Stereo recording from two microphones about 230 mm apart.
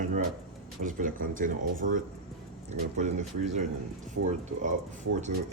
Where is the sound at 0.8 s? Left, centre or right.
Right.